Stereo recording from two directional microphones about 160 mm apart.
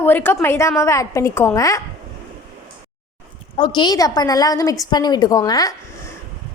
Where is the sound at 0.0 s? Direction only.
15° left (ahead or behind).